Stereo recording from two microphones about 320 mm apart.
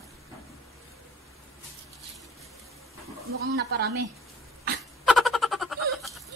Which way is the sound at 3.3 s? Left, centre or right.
Right.